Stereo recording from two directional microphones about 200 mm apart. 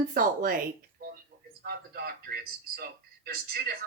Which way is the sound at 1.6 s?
50° right (ahead or behind).